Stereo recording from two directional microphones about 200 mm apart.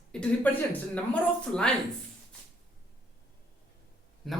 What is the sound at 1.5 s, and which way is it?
Speech, 5° left (ahead or behind).